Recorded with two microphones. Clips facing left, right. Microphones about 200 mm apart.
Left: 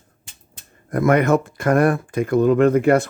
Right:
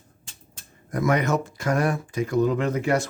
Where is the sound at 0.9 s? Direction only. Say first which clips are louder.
Left 6 dB; 55° left (ahead or behind).